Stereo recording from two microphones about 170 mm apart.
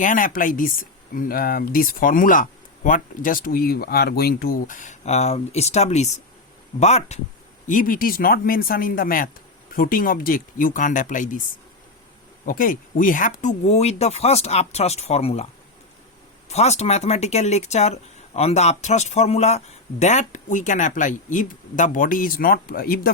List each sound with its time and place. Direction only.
0.0 s speech: 50° left (ahead or behind)
7.7 s speech: 55° left (ahead or behind)
12.5 s speech: 55° left (ahead or behind); by 15.4 s 35° left (ahead or behind)
16.5 s speech: 40° left (ahead or behind); by 23.1 s 60° left (ahead or behind)